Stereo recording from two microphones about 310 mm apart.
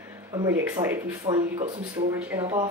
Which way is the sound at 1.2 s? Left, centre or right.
Right.